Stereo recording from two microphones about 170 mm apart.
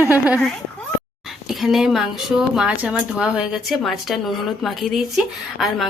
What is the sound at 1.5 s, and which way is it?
A woman's voice, 5° right (ahead or behind).